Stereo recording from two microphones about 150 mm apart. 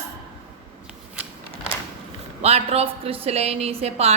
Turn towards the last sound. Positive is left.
turn(degrees=-45)  # may be behind; listen again after turning